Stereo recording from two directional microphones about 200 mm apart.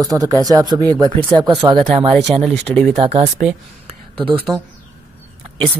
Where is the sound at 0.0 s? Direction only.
20° right (ahead or behind).